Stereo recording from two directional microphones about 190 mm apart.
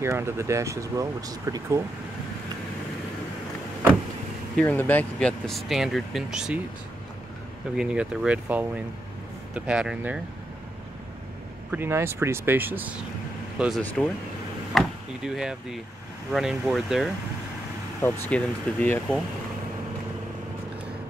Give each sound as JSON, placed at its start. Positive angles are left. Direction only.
{"t": 0.0, "sound": "speech", "side_deg": -15}
{"t": 4.6, "sound": "speech", "side_deg": 10}
{"t": 7.7, "sound": "speech", "side_deg": -5}
{"t": 11.7, "sound": "speech", "side_deg": -10}